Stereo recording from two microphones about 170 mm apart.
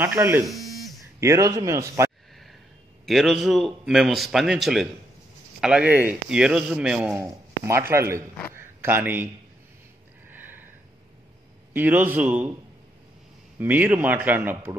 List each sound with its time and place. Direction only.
0.0 s speech: 15° right (ahead or behind)
0.5 s a sound: centre (ahead or behind)
1.2 s speech: 20° right (ahead or behind)
3.1 s a man's voice: centre (ahead or behind)
7.9 s speech: 15° right (ahead or behind)
8.5 s a sound: 10° right (ahead or behind)
10.3 s a sound: 10° right (ahead or behind)
11.7 s speech: 10° right (ahead or behind)
13.6 s speech: 10° right (ahead or behind)